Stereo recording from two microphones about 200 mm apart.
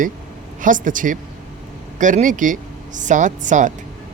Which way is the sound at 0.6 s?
40° right (ahead or behind).